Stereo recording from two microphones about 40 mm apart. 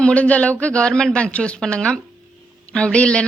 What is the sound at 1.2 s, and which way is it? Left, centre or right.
A woman's voice, left.